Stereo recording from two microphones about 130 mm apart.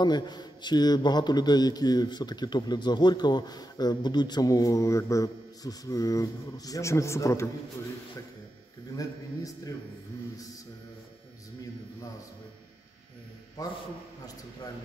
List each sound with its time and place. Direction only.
0.0 s a man's voice: 35° left (ahead or behind)
13.6 s a man's voice: 30° left (ahead or behind)